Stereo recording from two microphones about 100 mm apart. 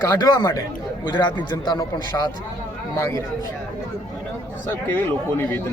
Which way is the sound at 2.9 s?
25° left (ahead or behind).